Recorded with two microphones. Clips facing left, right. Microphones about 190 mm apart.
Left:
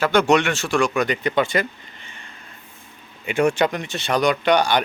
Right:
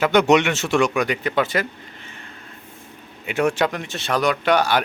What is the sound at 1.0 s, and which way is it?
Speech, 5° right (ahead or behind).